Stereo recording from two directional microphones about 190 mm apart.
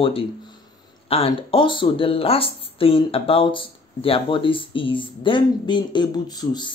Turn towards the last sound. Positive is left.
turn(degrees=20)  # may be behind; listen again after turning